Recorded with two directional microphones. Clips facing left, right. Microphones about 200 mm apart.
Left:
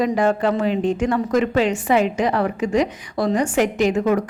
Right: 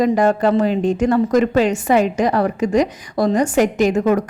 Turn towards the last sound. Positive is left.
turn(degrees=-45)  # may be behind; listen again after turning